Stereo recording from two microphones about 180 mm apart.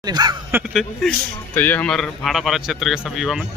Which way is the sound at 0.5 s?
10° right (ahead or behind).